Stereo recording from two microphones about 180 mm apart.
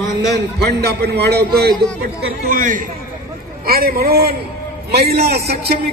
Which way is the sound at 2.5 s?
45° right (ahead or behind).